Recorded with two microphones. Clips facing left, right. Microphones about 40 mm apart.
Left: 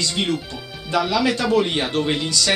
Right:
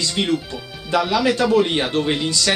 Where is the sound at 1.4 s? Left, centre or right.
Centre.